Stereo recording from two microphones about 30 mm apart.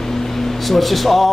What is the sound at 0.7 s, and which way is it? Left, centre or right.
Speech, centre.